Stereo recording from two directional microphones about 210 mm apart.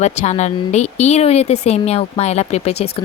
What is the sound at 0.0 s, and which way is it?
Speech, 30° left (ahead or behind).